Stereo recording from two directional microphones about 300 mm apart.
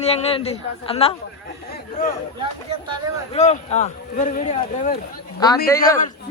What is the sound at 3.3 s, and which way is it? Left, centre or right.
A man's voice, left.